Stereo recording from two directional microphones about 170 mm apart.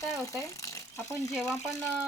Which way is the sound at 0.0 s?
20° left (ahead or behind).